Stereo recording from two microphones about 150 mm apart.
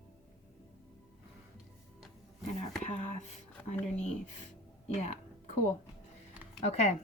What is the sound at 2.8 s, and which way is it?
Speech, 45° left (ahead or behind).